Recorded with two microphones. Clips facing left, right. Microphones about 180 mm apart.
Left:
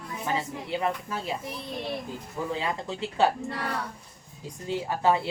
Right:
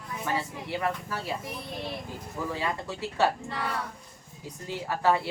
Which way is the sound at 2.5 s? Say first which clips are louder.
Left 2 dB; 20° left (ahead or behind).